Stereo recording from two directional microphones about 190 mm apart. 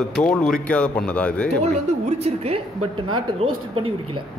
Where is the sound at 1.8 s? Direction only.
35° right (ahead or behind).